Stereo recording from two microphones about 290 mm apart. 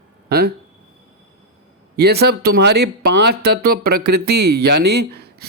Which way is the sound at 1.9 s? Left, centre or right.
Right.